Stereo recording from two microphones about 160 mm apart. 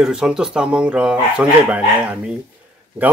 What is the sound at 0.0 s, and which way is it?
A man's voice, 5° right (ahead or behind).